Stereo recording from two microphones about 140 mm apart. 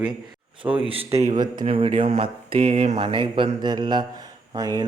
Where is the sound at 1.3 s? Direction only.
30° right (ahead or behind).